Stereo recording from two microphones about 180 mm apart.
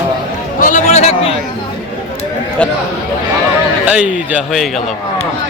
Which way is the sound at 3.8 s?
5° right (ahead or behind).